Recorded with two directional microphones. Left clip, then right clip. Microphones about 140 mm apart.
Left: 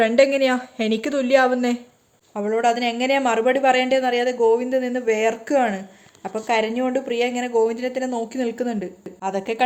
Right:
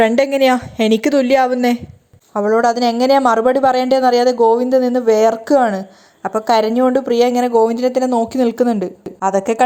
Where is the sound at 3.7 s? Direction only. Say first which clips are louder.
Right 6 dB; 55° right (ahead or behind).